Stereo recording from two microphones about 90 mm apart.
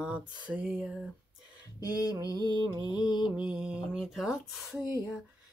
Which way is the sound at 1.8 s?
40° left (ahead or behind).